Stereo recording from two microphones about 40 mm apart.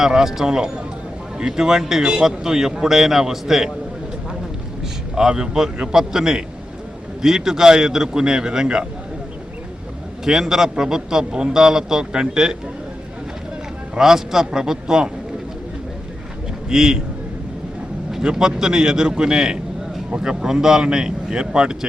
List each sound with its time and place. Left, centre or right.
0.0 s a man's voice: centre
5.1 s a man's voice: centre
10.2 s a man's voice: centre
14.0 s a man's voice: centre
16.6 s a man's voice: centre
18.2 s a man's voice: centre